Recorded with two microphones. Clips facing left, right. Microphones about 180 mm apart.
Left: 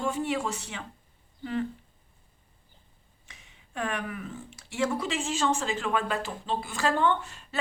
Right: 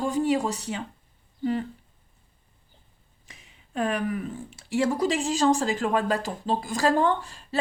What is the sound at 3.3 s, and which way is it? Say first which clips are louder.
Speech: right 7 dB; 35° right (ahead or behind).